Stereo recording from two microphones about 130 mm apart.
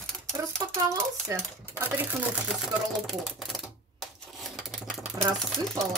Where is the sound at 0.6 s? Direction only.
25° right (ahead or behind).